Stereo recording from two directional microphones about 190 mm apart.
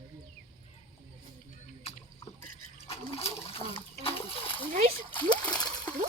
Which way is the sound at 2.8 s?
30° left (ahead or behind).